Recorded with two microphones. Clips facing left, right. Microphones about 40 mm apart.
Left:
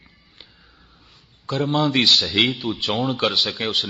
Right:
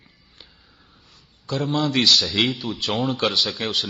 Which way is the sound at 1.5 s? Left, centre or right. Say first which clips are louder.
Left 2 dB; left.